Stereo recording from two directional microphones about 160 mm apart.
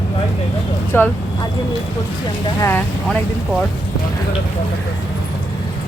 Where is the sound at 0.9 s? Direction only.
15° left (ahead or behind).